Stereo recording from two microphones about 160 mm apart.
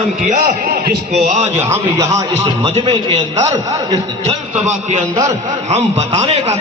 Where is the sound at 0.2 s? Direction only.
50° right (ahead or behind).